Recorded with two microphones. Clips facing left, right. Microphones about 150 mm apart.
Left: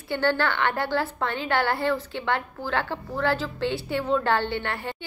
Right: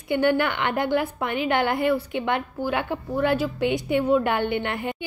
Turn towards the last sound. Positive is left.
turn(degrees=-15)  # may be behind; listen again after turning